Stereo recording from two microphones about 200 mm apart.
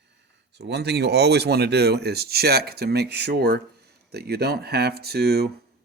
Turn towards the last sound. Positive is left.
turn(degrees=-55)  # may be behind; listen again after turning